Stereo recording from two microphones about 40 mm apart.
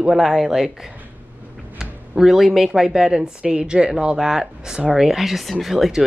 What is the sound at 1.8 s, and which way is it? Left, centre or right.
Speech, centre.